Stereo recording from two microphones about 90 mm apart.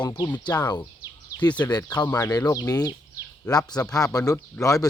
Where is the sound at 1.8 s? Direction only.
50° left (ahead or behind).